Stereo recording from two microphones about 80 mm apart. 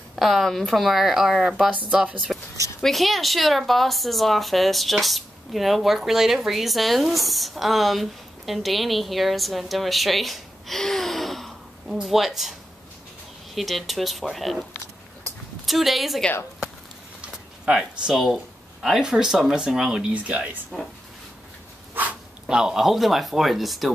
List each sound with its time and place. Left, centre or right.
0.1 s speech: centre
2.8 s speech: centre
13.6 s speech: centre
17.6 s speech: centre
20.1 s speech: centre
20.7 s speech: centre
22.5 s speech: centre